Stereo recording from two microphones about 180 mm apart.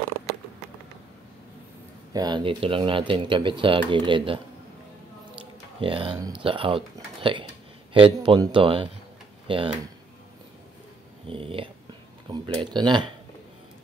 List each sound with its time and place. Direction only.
2.1 s speech: 25° right (ahead or behind)
5.8 s speech: 30° right (ahead or behind)
11.2 s speech: 30° right (ahead or behind)